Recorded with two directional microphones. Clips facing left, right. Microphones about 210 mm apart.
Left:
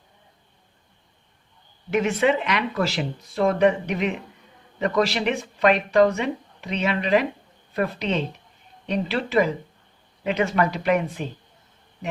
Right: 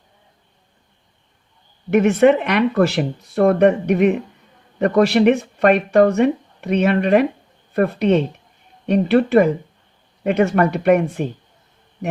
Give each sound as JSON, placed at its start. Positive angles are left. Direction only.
{"t": 1.9, "sound": "speech", "side_deg": -60}